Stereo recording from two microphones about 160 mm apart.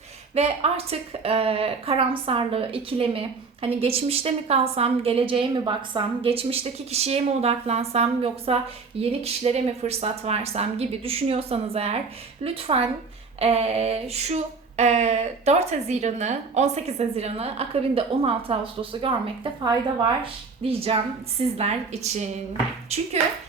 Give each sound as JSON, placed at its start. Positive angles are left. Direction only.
{"t": 0.3, "sound": "a woman's voice", "side_deg": -40}
{"t": 20.7, "sound": "a woman's voice", "side_deg": -35}